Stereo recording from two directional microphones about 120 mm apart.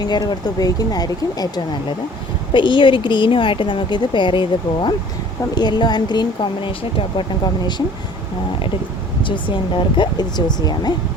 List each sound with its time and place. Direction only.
0.0 s speech: 35° left (ahead or behind)
9.2 s speech: 45° left (ahead or behind)